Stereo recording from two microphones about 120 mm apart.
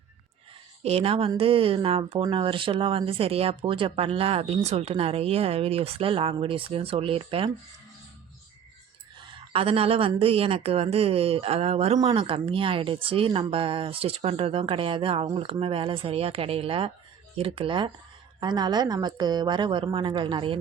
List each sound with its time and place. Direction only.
0.8 s speech: 60° right (ahead or behind)
9.2 s a sound: 55° right (ahead or behind)
10.2 s a woman's voice: 55° right (ahead or behind)